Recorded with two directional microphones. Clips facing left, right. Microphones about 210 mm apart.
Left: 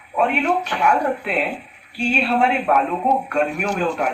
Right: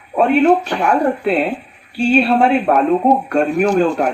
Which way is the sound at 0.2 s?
35° right (ahead or behind).